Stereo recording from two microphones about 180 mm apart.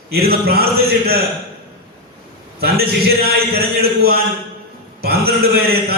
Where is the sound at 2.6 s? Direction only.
60° right (ahead or behind).